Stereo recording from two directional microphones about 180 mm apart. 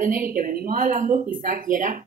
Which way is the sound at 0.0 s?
50° right (ahead or behind).